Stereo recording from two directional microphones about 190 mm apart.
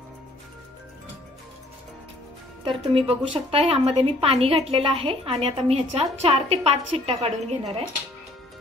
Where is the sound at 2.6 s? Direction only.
30° right (ahead or behind).